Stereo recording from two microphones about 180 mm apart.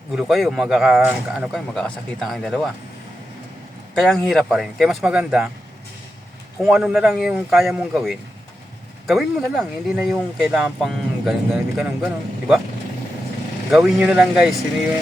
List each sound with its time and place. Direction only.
0.1 s a man's voice: centre (ahead or behind)
4.0 s a man's voice: centre (ahead or behind)
6.6 s a man's voice: centre (ahead or behind)
13.7 s a man's voice: 5° right (ahead or behind)